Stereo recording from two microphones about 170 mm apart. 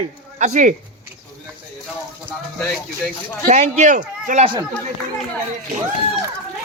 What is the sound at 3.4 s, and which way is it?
Speech, 45° right (ahead or behind).